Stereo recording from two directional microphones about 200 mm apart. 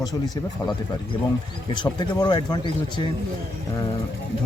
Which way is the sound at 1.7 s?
20° left (ahead or behind).